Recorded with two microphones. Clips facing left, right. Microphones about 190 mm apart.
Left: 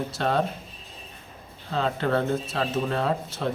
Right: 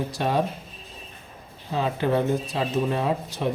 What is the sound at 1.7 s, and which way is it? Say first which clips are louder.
Speech: right 1 dB; 15° right (ahead or behind).